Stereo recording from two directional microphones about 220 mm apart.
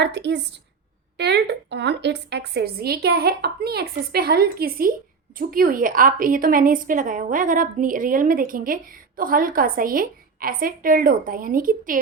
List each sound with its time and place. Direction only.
0.0 s a woman's voice: 50° right (ahead or behind)